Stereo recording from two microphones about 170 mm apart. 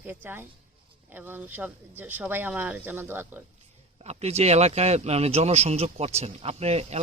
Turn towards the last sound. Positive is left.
turn(degrees=-40)  # may be behind; listen again after turning